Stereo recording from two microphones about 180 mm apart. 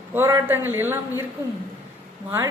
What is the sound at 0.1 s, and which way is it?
Speech, 10° right (ahead or behind).